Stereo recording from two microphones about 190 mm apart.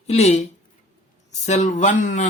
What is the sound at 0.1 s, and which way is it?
Speech, 35° left (ahead or behind).